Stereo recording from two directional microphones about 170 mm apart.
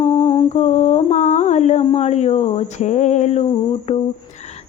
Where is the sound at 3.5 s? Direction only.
35° left (ahead or behind).